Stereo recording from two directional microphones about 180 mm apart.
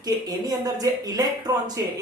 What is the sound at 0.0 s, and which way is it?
Speech, 20° right (ahead or behind).